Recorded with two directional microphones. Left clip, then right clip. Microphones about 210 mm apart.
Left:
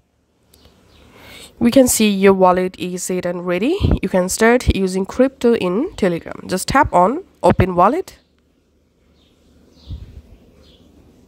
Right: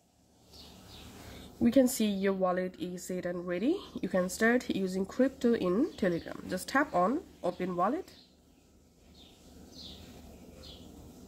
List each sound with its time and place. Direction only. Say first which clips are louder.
1.6 s a woman's voice: left 14 dB; 45° left (ahead or behind)